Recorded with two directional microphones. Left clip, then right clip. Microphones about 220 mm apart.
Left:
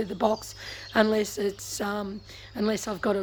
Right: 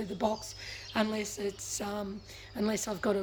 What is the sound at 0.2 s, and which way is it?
Speech, 15° left (ahead or behind).